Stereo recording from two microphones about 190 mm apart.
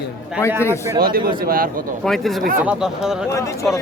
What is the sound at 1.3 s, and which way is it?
Speech, 50° right (ahead or behind).